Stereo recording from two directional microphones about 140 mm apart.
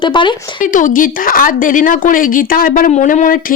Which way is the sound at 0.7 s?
75° left (ahead or behind).